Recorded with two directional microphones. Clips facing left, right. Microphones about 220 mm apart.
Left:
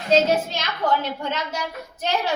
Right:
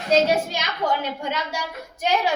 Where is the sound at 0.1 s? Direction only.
10° right (ahead or behind).